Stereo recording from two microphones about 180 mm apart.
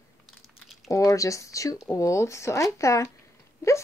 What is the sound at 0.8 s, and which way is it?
A woman's voice, 15° left (ahead or behind).